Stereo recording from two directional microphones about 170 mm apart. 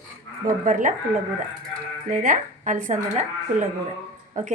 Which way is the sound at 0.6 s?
50° right (ahead or behind).